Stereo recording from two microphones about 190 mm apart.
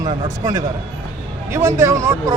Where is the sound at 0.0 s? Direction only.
15° right (ahead or behind).